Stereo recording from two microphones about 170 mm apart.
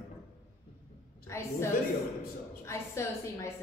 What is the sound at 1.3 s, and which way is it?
Speech, 15° left (ahead or behind).